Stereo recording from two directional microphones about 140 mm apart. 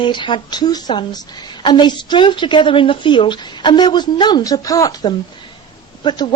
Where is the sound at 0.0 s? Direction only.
35° left (ahead or behind).